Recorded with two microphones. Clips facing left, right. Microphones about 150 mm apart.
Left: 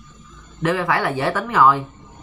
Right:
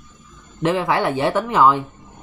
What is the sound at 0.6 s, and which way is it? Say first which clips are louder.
Speech: right 1 dB; 20° right (ahead or behind).